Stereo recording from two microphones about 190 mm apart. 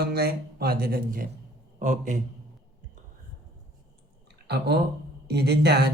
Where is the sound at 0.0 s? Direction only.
55° right (ahead or behind).